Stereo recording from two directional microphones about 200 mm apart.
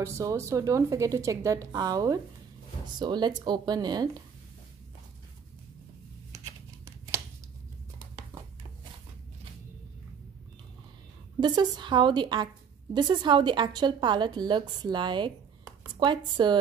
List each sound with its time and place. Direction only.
0.0 s a woman's voice: 15° right (ahead or behind)
6.3 s a sound: 10° right (ahead or behind)
11.3 s a woman's voice: 20° right (ahead or behind)